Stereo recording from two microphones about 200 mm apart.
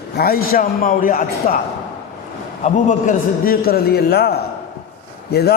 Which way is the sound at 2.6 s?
35° left (ahead or behind).